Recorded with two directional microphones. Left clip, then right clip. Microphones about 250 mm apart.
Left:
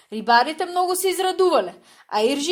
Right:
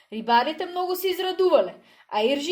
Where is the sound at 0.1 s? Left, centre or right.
Left.